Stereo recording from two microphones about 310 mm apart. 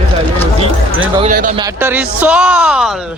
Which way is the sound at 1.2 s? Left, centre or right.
Right.